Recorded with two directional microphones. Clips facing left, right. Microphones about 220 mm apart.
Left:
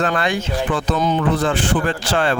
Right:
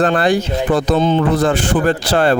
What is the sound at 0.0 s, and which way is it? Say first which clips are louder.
Speech: right 6 dB; 35° right (ahead or behind).